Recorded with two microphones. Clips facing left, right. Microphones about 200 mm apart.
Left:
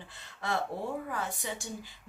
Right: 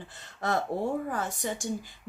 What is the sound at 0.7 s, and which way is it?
Speech, 45° right (ahead or behind).